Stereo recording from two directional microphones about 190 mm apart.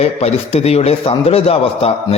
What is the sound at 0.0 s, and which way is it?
A man's voice, 35° left (ahead or behind).